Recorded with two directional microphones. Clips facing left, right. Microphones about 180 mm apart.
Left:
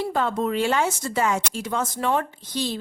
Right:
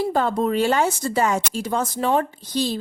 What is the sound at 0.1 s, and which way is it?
Speech, 35° right (ahead or behind).